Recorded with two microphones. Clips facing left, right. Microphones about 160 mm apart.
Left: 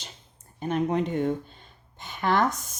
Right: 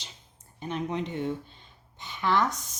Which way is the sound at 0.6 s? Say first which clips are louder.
Left 6 dB; 50° left (ahead or behind).